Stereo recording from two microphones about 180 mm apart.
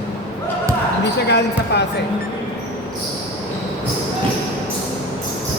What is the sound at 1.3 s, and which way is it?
Speech, 70° left (ahead or behind).